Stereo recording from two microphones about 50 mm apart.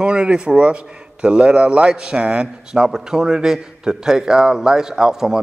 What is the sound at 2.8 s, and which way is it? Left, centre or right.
A man's voice, centre.